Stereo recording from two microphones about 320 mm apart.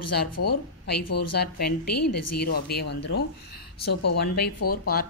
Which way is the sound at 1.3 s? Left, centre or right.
Left.